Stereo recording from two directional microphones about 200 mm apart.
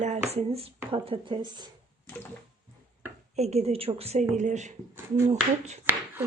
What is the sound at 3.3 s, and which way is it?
Speech, 35° right (ahead or behind).